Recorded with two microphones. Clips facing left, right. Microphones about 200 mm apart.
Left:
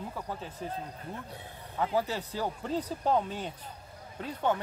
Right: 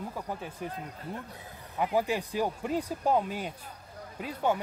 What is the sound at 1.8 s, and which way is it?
Speech, 15° right (ahead or behind).